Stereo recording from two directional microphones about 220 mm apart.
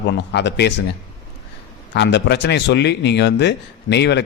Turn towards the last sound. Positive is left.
turn(degrees=50)  # may be behind; listen again after turning